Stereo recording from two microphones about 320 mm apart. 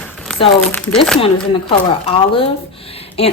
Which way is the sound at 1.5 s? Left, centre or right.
Centre.